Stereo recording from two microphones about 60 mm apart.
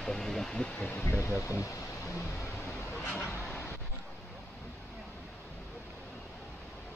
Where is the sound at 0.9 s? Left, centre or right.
Left.